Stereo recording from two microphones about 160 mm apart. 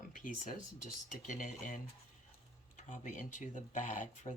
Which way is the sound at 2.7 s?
50° left (ahead or behind).